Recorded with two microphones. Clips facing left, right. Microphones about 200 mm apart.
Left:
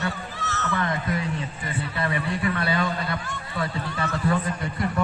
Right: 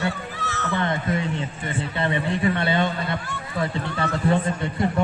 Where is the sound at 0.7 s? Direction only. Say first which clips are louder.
Right 3 dB; 25° right (ahead or behind).